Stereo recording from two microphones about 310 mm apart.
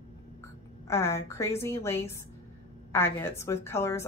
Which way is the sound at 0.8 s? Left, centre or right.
Centre.